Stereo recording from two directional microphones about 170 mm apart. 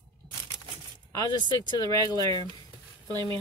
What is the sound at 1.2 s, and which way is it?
Speech, 25° left (ahead or behind).